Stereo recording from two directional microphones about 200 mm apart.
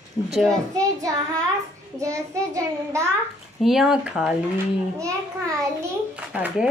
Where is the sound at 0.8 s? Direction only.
15° right (ahead or behind).